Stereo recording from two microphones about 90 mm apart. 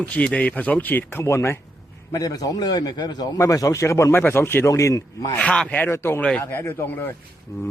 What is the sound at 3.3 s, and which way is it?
A man's voice, 35° left (ahead or behind).